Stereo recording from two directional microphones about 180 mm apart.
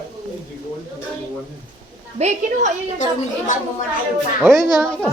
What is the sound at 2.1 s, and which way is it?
Speech, 40° right (ahead or behind).